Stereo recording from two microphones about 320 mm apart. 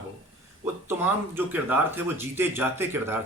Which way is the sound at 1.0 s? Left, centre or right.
Centre.